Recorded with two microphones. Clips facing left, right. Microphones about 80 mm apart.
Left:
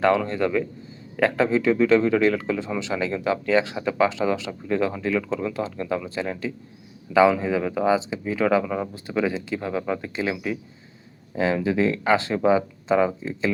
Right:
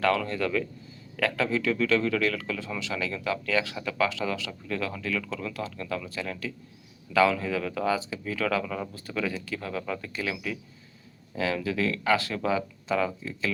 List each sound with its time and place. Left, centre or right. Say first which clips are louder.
0.0 s speech: left 5 dB; left